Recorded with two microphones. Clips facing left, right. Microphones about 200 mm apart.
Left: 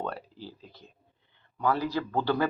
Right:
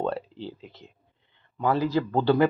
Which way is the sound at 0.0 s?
25° right (ahead or behind).